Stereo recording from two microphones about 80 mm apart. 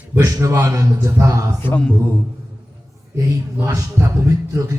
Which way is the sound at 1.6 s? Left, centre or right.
Left.